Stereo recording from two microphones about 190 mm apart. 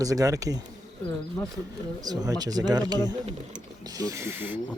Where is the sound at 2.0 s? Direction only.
20° right (ahead or behind).